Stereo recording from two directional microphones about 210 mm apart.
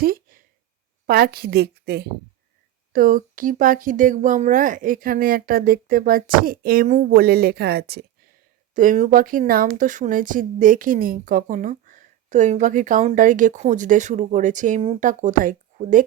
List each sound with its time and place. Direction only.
0.0 s a sound: 45° right (ahead or behind)
1.0 s a woman's voice: 45° right (ahead or behind)
8.7 s speech: 40° right (ahead or behind)